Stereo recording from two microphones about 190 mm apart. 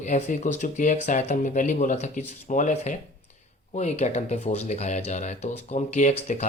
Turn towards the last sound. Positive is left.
turn(degrees=35)  # may be behind; listen again after turning